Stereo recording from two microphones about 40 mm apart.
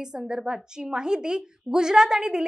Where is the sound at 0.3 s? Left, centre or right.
Centre.